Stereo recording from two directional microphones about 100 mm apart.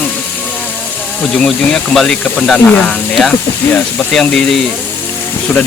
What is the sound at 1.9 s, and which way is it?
Speech, 5° left (ahead or behind).